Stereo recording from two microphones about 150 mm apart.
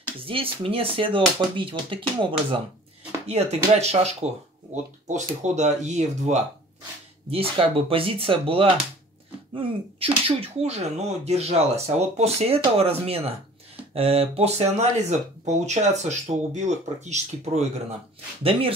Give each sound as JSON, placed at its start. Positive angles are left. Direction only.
{"t": 0.2, "sound": "speech", "side_deg": -35}
{"t": 3.3, "sound": "speech", "side_deg": -45}
{"t": 7.2, "sound": "speech", "side_deg": -40}
{"t": 18.4, "sound": "speech", "side_deg": -40}